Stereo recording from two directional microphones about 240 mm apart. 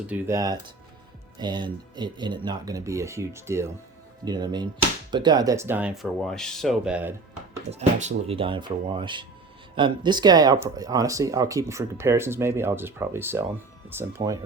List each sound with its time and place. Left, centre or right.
0.1 s speech: centre
7.7 s speech: right; by 14.3 s centre